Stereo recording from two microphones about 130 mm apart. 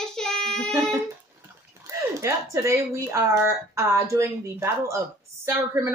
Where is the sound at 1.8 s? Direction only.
25° right (ahead or behind).